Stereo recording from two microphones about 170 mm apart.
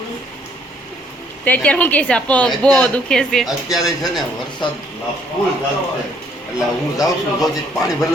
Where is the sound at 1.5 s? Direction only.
10° left (ahead or behind).